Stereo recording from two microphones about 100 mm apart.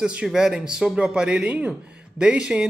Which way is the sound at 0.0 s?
10° right (ahead or behind).